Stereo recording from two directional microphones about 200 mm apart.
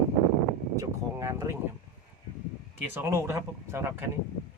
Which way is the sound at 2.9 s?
10° right (ahead or behind).